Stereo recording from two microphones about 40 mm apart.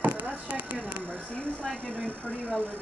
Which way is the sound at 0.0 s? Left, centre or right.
Right.